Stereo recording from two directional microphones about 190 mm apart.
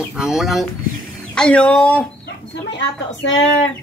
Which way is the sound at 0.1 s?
Centre (ahead or behind).